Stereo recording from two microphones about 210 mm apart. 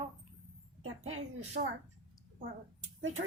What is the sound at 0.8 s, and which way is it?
Speech, 80° right.